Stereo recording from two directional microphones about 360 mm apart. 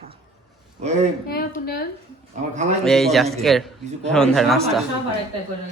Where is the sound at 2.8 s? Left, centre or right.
Centre.